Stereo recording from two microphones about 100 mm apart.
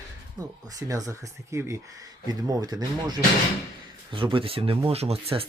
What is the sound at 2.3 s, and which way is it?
Speech, 40° right (ahead or behind).